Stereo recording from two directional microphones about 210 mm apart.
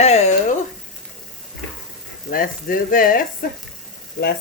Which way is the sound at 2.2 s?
40° left (ahead or behind).